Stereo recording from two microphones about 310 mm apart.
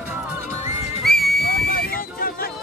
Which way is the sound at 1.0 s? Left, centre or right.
Centre.